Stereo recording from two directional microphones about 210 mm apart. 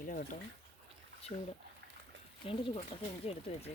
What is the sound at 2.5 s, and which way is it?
Speech, 25° left (ahead or behind).